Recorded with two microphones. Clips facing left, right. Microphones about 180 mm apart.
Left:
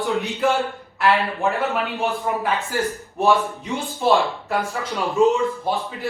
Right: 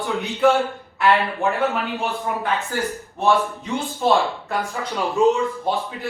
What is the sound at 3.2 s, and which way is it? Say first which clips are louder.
Speech: even; 15° left (ahead or behind).